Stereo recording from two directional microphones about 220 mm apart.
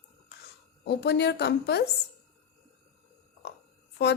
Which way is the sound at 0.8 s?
50° left (ahead or behind).